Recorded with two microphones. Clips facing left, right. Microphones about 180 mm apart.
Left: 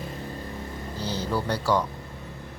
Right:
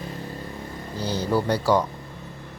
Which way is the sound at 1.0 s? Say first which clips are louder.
Right 5 dB; 15° right (ahead or behind).